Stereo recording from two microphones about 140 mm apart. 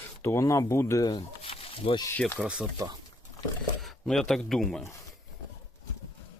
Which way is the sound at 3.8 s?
Centre (ahead or behind).